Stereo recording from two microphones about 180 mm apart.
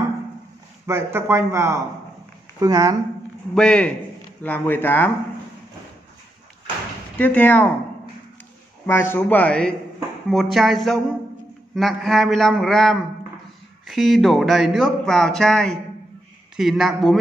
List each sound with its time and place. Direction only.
0.8 s a woman's voice: 15° right (ahead or behind)
3.5 s speech: 5° left (ahead or behind)
7.2 s speech: 10° left (ahead or behind)
8.8 s speech: 15° left (ahead or behind)